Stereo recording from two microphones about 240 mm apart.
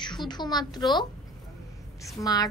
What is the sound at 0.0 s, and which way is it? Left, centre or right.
Speech, centre.